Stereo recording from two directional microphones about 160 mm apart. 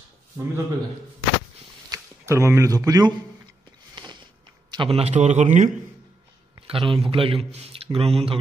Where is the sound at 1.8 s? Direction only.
20° right (ahead or behind).